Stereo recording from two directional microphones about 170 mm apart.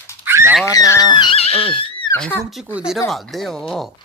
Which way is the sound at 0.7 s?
20° left (ahead or behind).